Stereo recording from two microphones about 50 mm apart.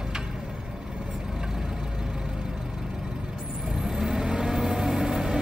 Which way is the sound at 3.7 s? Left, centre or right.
Centre.